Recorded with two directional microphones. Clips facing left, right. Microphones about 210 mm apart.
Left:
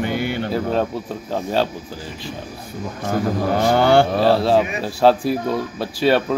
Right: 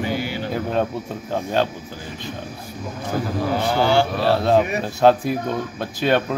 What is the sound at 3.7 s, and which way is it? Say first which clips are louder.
Speech: left 4 dB; 55° left (ahead or behind).